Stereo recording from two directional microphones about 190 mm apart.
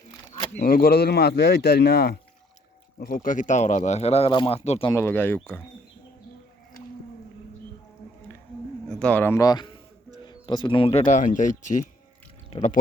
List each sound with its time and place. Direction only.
0.5 s speech: 50° left (ahead or behind)
3.2 s speech: 40° left (ahead or behind)
4.9 s speech: 15° left (ahead or behind)
8.9 s a man's voice: 5° left (ahead or behind); by 11.0 s 30° left (ahead or behind)
11.0 s speech: 45° left (ahead or behind)